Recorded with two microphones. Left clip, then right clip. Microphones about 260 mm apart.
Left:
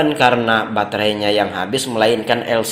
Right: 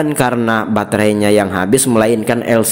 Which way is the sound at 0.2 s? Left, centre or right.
Right.